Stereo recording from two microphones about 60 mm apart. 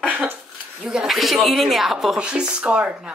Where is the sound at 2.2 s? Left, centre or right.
Centre.